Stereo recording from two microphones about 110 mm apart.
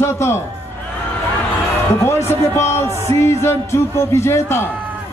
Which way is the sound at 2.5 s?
25° left (ahead or behind).